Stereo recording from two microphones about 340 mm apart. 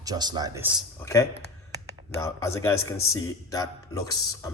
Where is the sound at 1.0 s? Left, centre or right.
Centre.